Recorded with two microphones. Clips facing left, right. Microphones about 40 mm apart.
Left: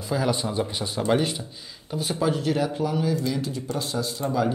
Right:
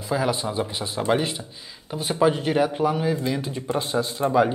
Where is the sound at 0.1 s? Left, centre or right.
Centre.